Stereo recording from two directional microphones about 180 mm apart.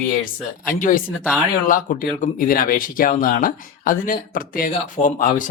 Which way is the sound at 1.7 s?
50° left (ahead or behind).